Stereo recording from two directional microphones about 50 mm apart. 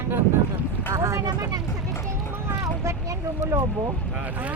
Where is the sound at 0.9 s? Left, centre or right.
Right.